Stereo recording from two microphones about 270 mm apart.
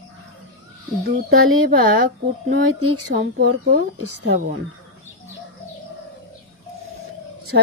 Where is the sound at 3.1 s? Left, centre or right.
Right.